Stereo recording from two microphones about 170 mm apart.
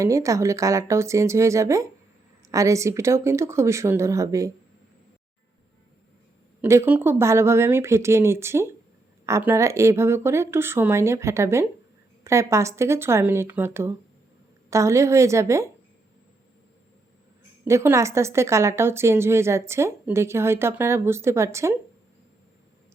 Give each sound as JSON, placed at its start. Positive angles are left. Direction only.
{"t": 0.0, "sound": "a woman's voice", "side_deg": -20}
{"t": 6.6, "sound": "a woman's voice", "side_deg": -15}
{"t": 17.7, "sound": "a woman's voice", "side_deg": -15}